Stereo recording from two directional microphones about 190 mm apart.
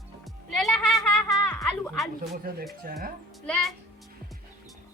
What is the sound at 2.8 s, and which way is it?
Speech, 50° right (ahead or behind).